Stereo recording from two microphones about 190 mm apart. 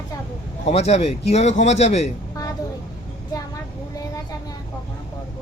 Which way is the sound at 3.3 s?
20° left (ahead or behind).